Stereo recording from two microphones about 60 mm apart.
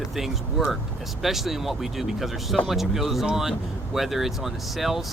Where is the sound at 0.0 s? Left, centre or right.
Centre.